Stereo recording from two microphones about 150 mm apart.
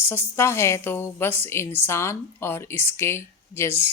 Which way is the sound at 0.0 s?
15° left (ahead or behind).